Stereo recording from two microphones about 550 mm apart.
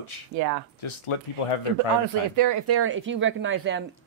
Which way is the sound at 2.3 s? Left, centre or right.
Right.